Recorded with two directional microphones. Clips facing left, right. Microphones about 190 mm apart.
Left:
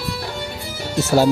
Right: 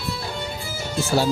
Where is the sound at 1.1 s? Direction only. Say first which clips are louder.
Left 6 dB; 45° left (ahead or behind).